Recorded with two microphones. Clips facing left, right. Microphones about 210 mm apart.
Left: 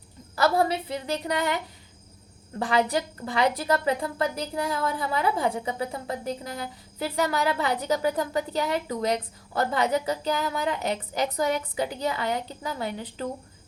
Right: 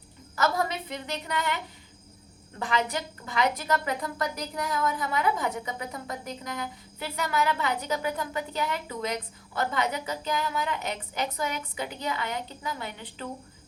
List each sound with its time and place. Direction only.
0.3 s a woman's voice: 30° left (ahead or behind)
2.6 s a woman's voice: 35° left (ahead or behind)